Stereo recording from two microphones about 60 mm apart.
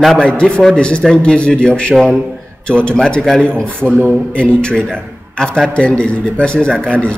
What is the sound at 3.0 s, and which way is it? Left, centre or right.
Speech, centre.